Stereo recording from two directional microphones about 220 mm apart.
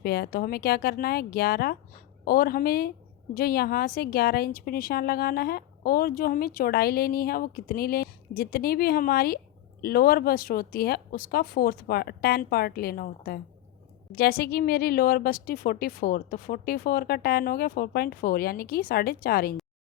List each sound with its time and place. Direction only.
0.0 s speech: 45° left (ahead or behind)